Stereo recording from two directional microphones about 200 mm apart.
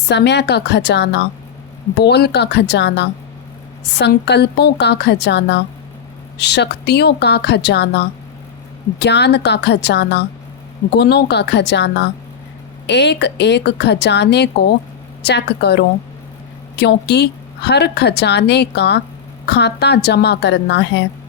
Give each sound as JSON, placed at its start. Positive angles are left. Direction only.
{"t": 0.1, "sound": "a woman's voice", "side_deg": 55}